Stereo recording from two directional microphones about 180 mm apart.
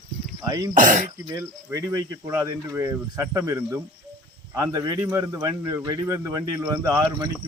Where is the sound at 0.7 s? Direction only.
45° right (ahead or behind).